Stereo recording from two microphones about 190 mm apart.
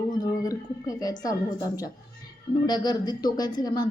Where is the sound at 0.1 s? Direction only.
20° left (ahead or behind).